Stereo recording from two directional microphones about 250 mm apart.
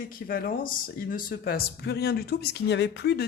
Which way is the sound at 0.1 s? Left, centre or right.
Left.